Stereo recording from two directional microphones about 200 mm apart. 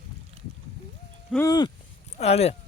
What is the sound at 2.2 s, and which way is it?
Speech, 30° left (ahead or behind).